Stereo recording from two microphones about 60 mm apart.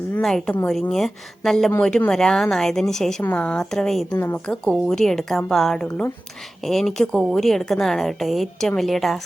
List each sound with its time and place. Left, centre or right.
0.2 s a woman's voice: centre
3.2 s a woman's voice: left
3.6 s a woman's voice: centre